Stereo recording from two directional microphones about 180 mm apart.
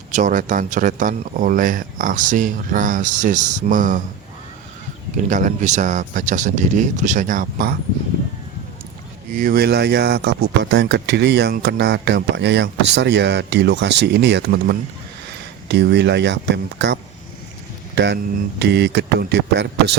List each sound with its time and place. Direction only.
0.1 s speech: 45° right (ahead or behind)
5.1 s speech: 45° right (ahead or behind)
9.3 s speech: 50° right (ahead or behind); by 19.6 s 70° right (ahead or behind)